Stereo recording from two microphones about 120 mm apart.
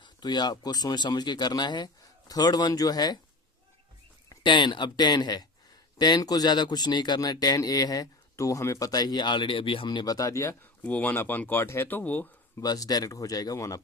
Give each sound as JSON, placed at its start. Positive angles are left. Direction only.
{"t": 0.0, "sound": "speech", "side_deg": 40}
{"t": 4.3, "sound": "speech", "side_deg": 40}
{"t": 10.8, "sound": "speech", "side_deg": 15}
{"t": 12.5, "sound": "speech", "side_deg": 30}